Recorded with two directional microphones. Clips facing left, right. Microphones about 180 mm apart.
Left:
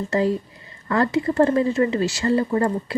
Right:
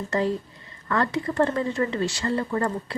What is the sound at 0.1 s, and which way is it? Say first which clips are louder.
Speech: left 3 dB; 25° left (ahead or behind).